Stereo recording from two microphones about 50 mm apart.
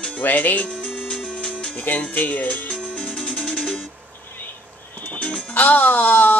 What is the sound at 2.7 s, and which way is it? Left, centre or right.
Music, left.